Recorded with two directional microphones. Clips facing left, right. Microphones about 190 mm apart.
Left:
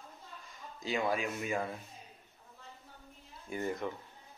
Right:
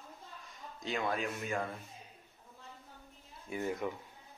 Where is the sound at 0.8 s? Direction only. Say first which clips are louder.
Left 2 dB; 5° left (ahead or behind).